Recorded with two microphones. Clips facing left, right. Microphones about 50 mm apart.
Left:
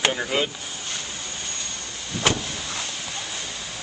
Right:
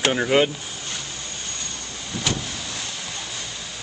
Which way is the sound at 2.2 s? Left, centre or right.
Left.